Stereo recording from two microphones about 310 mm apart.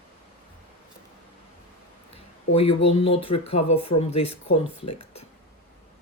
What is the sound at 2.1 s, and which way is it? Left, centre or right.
Speech, centre.